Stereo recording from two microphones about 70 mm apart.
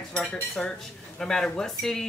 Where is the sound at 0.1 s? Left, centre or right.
Centre.